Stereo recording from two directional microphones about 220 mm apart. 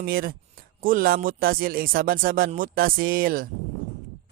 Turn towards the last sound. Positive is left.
turn(degrees=-40)  # may be behind; listen again after turning